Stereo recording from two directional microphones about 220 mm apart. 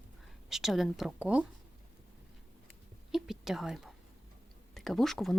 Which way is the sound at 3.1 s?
Centre (ahead or behind).